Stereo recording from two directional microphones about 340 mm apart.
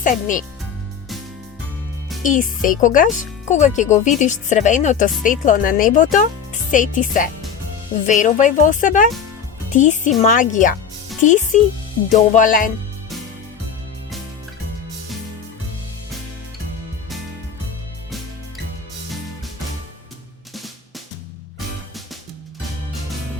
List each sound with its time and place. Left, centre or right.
0.0 s speech: left
2.2 s speech: left